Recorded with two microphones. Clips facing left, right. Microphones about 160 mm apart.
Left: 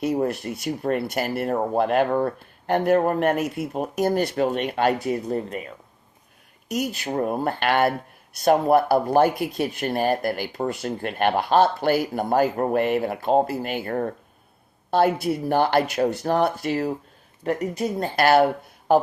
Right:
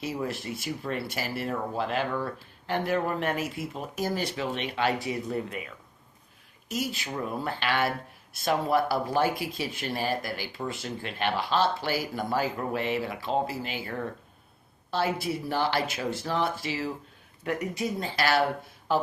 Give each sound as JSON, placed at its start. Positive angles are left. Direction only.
{"t": 0.0, "sound": "speech", "side_deg": 50}
{"t": 6.7, "sound": "speech", "side_deg": 50}
{"t": 17.4, "sound": "speech", "side_deg": 40}